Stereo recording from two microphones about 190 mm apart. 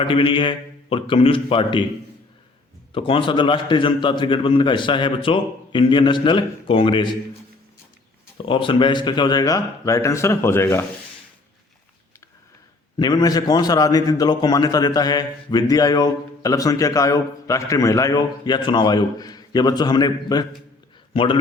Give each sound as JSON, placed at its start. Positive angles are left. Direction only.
{"t": 0.0, "sound": "a man's voice", "side_deg": 25}
{"t": 2.9, "sound": "a man's voice", "side_deg": 25}
{"t": 8.4, "sound": "a man's voice", "side_deg": 25}
{"t": 13.0, "sound": "a man's voice", "side_deg": 20}